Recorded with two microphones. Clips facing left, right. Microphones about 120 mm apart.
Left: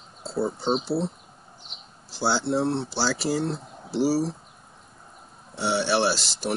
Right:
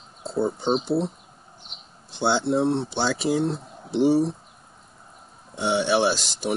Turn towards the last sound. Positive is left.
turn(degrees=5)  # may be behind; listen again after turning